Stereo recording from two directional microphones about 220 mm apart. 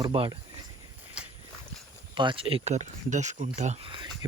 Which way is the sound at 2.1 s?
20° right (ahead or behind).